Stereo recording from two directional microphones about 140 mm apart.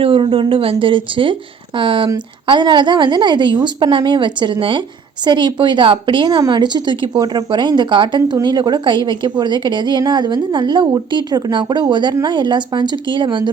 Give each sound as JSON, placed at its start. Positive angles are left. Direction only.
{"t": 0.0, "sound": "a woman's voice", "side_deg": -40}